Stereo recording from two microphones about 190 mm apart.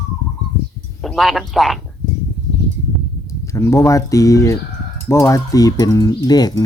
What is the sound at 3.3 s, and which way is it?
Speech, 15° left (ahead or behind).